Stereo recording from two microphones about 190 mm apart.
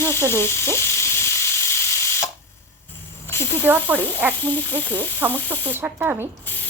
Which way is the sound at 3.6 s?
10° right (ahead or behind).